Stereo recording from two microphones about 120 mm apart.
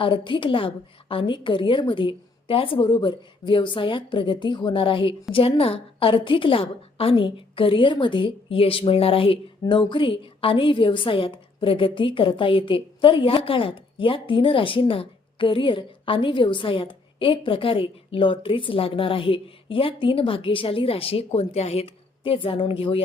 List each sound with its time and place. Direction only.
0.0 s a woman's voice: 45° left (ahead or behind)